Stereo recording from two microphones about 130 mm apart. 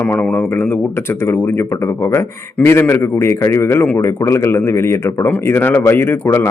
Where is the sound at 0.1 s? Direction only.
10° left (ahead or behind).